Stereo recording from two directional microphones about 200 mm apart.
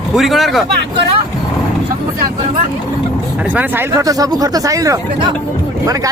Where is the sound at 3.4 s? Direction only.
10° right (ahead or behind).